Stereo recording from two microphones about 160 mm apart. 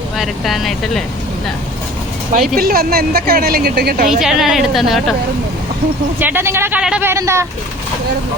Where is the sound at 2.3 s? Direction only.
60° right (ahead or behind); by 4.0 s 75° right (ahead or behind).